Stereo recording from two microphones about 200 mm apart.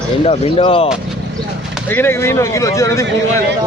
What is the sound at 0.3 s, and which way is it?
Speech, 25° left (ahead or behind).